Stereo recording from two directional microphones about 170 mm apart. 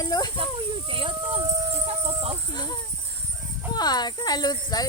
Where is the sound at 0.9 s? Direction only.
30° right (ahead or behind).